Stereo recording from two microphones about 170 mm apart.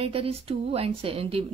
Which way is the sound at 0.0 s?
35° right (ahead or behind).